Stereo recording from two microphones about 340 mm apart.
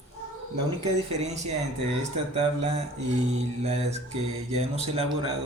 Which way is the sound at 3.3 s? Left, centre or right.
Centre.